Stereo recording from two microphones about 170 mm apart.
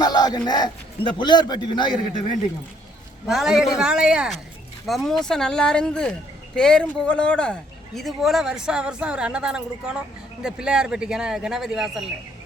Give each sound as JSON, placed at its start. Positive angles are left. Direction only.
{"t": 0.0, "sound": "a man's voice", "side_deg": 25}
{"t": 3.2, "sound": "speech", "side_deg": -5}